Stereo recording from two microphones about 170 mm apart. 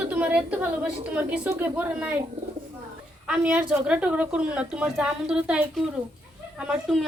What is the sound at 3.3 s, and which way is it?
A woman's voice, 5° right (ahead or behind).